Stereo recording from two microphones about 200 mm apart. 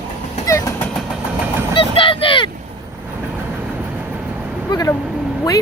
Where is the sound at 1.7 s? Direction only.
25° left (ahead or behind).